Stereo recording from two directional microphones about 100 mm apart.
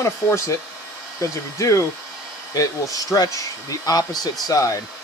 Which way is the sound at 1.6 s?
30° left (ahead or behind).